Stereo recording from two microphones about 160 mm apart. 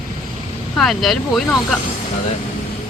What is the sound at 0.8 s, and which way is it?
Speech, centre (ahead or behind).